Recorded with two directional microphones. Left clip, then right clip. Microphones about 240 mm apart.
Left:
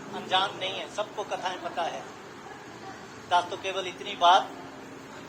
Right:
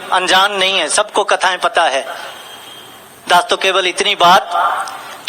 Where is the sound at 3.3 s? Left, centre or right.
Right.